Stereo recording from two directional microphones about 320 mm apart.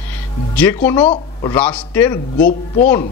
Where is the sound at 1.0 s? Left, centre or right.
Centre.